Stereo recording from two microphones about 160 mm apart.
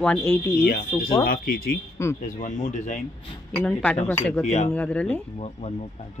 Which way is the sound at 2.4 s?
50° left (ahead or behind).